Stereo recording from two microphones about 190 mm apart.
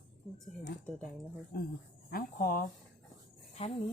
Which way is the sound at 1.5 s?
50° left (ahead or behind).